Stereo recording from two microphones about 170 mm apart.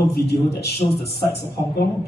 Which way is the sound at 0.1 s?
75° left (ahead or behind).